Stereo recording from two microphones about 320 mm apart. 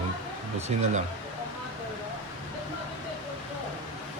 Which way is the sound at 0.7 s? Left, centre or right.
Right.